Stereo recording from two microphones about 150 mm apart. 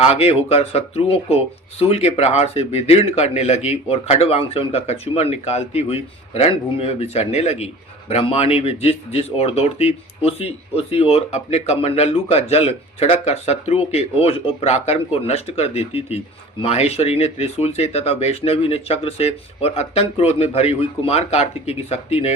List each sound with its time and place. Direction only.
0.0 s speech: 40° left (ahead or behind)